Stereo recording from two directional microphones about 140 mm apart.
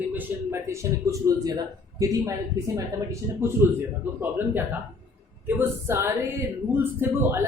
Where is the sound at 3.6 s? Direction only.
15° right (ahead or behind).